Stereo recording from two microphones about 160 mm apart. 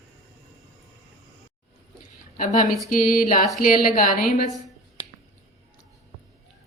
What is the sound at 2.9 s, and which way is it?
A woman's voice, 60° left (ahead or behind).